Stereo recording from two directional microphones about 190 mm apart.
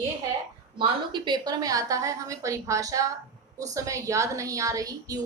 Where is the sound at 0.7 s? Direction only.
25° right (ahead or behind).